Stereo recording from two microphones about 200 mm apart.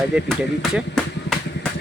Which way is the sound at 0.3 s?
Centre (ahead or behind).